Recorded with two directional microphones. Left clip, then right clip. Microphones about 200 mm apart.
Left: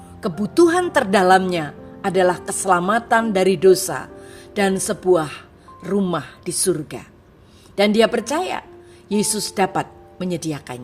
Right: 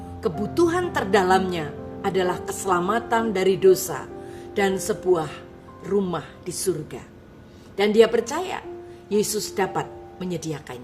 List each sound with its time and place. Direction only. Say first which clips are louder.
0.2 s speech: left 5 dB; 40° left (ahead or behind)